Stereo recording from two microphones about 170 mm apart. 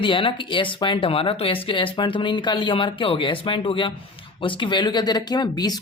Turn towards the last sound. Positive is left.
turn(degrees=25)  # may be behind; listen again after turning